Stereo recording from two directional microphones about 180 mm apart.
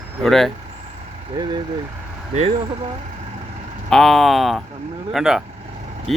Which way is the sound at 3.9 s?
Centre (ahead or behind).